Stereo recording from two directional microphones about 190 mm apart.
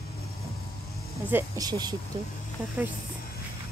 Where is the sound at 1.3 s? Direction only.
20° right (ahead or behind).